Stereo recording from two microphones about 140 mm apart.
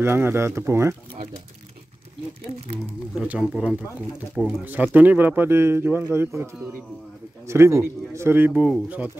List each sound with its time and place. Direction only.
0.0 s speech: 15° right (ahead or behind)
3.2 s speech: 5° right (ahead or behind)